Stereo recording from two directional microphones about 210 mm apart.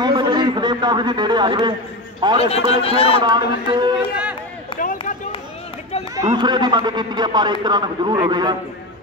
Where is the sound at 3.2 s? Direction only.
20° right (ahead or behind).